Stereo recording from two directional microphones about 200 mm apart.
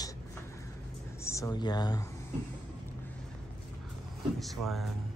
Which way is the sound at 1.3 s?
15° left (ahead or behind).